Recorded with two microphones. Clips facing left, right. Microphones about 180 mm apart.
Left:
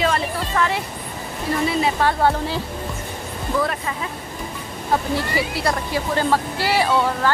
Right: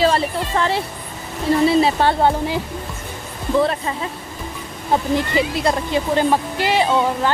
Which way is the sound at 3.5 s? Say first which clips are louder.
Right 5 dB; 25° right (ahead or behind).